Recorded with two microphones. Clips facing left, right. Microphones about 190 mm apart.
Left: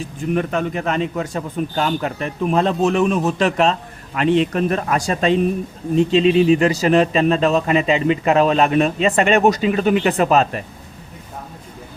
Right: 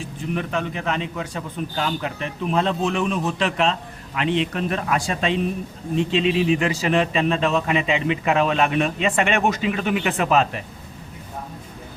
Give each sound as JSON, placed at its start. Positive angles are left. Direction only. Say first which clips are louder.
{"t": 0.0, "sound": "a man's voice", "louder": "left 6 dB", "side_deg": 45}